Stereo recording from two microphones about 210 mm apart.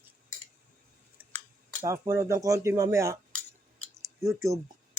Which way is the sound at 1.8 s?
15° right (ahead or behind).